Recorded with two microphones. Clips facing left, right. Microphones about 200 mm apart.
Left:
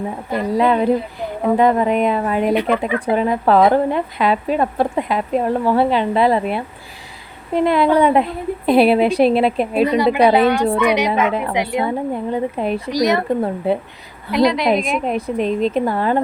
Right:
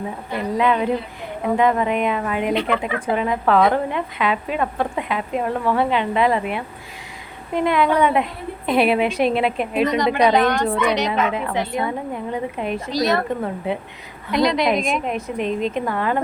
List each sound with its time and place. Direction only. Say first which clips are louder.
0.3 s speech: left 3 dB; 40° left (ahead or behind)
9.8 s a woman's voice: left 3 dB; 10° left (ahead or behind)
12.3 s speech: left 3 dB; 35° left (ahead or behind)
12.9 s a woman's voice: left 2 dB; 15° left (ahead or behind)
14.3 s a woman's voice: left 3 dB; centre (ahead or behind)
15.0 s speech: left 4 dB; 35° left (ahead or behind)